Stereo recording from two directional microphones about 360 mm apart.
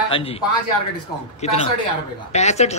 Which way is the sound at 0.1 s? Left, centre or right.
Centre.